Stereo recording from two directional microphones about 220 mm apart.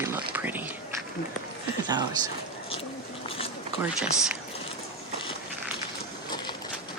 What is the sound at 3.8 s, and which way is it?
Speech, 5° right (ahead or behind).